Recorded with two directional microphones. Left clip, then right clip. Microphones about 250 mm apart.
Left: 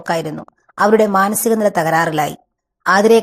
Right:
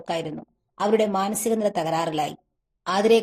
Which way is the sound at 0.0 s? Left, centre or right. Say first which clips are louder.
Left 8 dB; centre.